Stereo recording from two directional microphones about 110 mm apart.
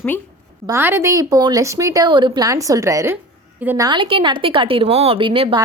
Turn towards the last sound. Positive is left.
turn(degrees=-50)  # may be behind; listen again after turning